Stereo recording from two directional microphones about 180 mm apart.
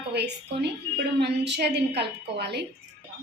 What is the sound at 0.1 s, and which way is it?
A woman's voice, 65° right (ahead or behind).